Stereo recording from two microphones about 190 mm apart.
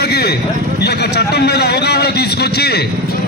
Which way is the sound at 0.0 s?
60° left (ahead or behind).